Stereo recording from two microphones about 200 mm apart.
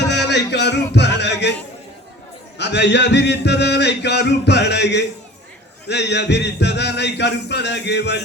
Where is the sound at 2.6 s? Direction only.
60° left (ahead or behind).